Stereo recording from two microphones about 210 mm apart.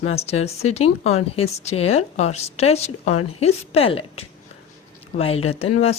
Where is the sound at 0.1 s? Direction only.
30° left (ahead or behind).